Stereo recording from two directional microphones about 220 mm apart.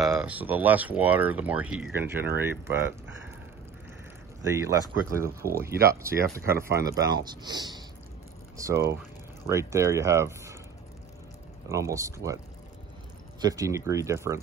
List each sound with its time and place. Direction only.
0.1 s speech: 5° right (ahead or behind)
4.4 s speech: 15° right (ahead or behind)
11.7 s speech: 15° right (ahead or behind)
13.4 s speech: 15° right (ahead or behind)